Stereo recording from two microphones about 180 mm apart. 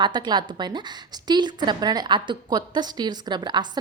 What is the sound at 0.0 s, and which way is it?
A woman's voice, 25° right (ahead or behind).